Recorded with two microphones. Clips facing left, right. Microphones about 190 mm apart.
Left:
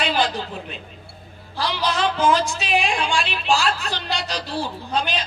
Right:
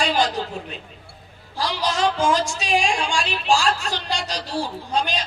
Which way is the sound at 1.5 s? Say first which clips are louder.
Even; 40° right (ahead or behind).